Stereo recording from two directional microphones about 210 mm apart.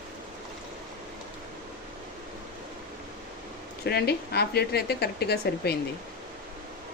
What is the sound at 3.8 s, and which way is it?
Speech, 50° left (ahead or behind).